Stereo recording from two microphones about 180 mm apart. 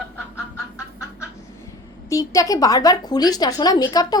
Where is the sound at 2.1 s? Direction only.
20° left (ahead or behind).